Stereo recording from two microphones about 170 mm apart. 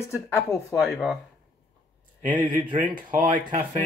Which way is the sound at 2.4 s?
30° right (ahead or behind).